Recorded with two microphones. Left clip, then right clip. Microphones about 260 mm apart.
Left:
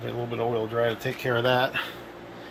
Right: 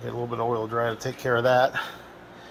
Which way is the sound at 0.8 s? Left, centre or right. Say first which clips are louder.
Left 1 dB; right.